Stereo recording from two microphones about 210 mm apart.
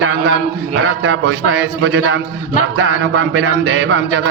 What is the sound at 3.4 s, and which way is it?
Speech, 65° right (ahead or behind).